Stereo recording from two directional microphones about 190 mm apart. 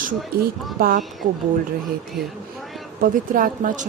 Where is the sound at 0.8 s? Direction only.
50° right (ahead or behind).